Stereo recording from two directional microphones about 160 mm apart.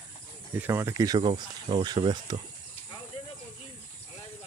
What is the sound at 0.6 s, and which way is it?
Speech, 15° right (ahead or behind).